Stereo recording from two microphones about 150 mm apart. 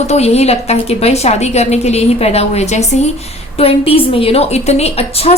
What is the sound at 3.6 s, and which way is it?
A woman's voice, 40° left (ahead or behind).